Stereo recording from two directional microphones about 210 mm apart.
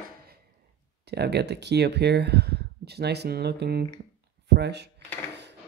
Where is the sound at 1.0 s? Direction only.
50° right (ahead or behind).